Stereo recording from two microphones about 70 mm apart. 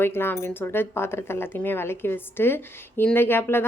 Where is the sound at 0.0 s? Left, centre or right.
Left.